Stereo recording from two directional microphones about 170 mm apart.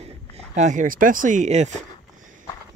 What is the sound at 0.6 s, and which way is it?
Speech, 45° right (ahead or behind).